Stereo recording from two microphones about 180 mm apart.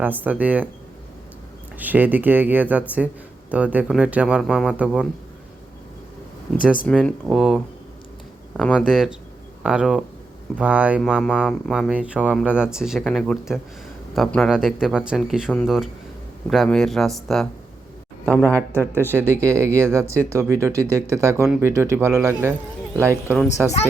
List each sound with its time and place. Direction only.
0.0 s speech: 10° right (ahead or behind)
1.8 s speech: 10° right (ahead or behind)
6.9 s speech: centre (ahead or behind)
19.4 s speech: 15° right (ahead or behind)